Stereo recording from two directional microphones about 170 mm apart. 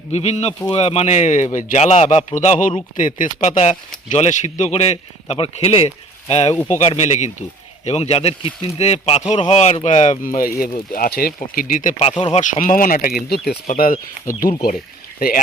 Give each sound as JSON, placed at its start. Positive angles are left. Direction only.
{"t": 0.1, "sound": "a man's voice", "side_deg": 40}
{"t": 11.3, "sound": "a man's voice", "side_deg": 50}
{"t": 12.0, "sound": "speech", "side_deg": 30}
{"t": 12.4, "sound": "speech", "side_deg": 50}